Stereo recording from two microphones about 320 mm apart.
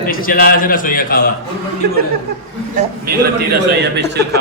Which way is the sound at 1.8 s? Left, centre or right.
Right.